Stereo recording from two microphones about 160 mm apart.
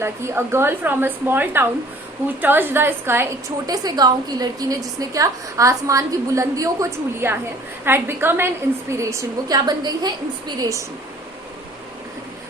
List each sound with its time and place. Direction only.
0.0 s a woman's voice: 15° right (ahead or behind)
3.7 s a woman's voice: 25° right (ahead or behind)